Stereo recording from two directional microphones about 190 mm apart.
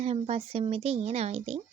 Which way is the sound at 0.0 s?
30° right (ahead or behind).